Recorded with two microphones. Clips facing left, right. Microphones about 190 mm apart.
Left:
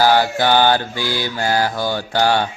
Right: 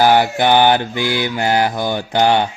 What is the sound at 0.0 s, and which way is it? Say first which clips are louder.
Mantra: right 2 dB; 20° right (ahead or behind).